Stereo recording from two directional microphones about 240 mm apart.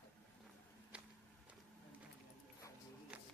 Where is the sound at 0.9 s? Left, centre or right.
Centre.